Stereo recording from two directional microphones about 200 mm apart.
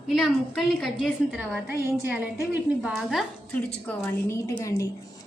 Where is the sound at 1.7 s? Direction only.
15° right (ahead or behind).